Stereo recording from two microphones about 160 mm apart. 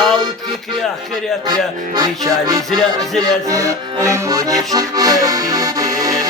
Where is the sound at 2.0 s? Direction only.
25° right (ahead or behind).